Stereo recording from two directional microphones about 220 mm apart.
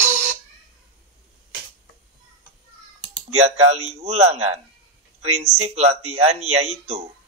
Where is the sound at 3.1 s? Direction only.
30° right (ahead or behind).